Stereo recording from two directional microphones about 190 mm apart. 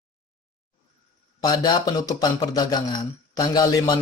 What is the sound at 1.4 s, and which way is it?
Speech, 20° left (ahead or behind).